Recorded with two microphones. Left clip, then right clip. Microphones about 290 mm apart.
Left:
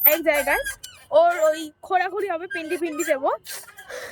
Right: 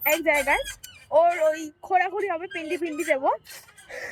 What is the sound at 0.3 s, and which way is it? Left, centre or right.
Speech, centre.